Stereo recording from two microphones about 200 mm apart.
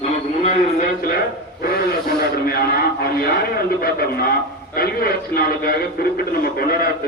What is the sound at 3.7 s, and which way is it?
A man's voice, 50° left (ahead or behind).